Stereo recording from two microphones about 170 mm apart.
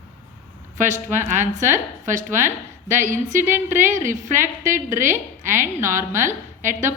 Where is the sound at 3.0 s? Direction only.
50° right (ahead or behind).